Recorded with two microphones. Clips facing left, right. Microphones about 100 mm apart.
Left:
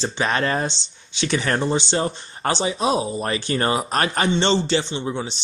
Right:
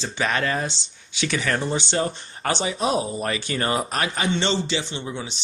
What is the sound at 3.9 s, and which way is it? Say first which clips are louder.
Speech: left 4 dB; 45° left (ahead or behind).